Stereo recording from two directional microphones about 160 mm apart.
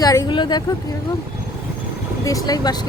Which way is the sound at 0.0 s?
20° left (ahead or behind).